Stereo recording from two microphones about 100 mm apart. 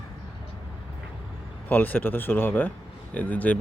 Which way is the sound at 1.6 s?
20° left (ahead or behind).